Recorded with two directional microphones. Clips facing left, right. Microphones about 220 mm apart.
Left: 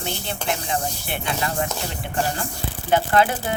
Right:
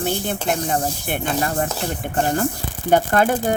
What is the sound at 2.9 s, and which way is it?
Speech, 45° right (ahead or behind).